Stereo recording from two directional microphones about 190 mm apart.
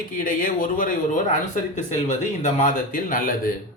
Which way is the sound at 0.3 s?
45° left (ahead or behind).